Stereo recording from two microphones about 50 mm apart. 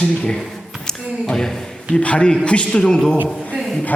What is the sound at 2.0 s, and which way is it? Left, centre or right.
Speech, left.